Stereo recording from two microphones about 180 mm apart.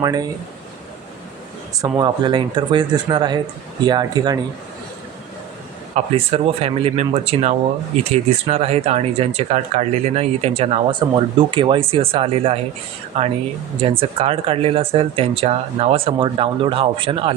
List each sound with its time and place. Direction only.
0.0 s speech: 20° right (ahead or behind)
2.0 s speech: 25° right (ahead or behind)
5.9 s speech: 35° right (ahead or behind)